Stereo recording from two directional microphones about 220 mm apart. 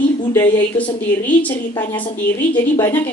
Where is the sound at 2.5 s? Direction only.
20° left (ahead or behind).